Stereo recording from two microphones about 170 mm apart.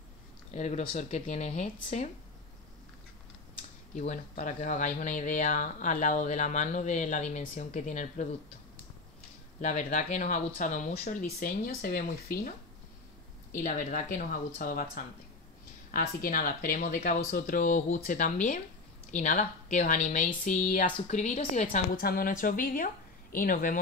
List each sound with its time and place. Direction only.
0.5 s speech: 40° left (ahead or behind)
3.9 s speech: 45° left (ahead or behind)
9.6 s speech: 45° left (ahead or behind)
13.6 s speech: 45° left (ahead or behind)
21.9 s speech: 60° left (ahead or behind)